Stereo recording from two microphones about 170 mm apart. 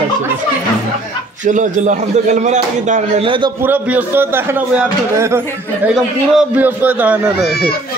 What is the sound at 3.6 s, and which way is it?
A man's voice, 10° right (ahead or behind).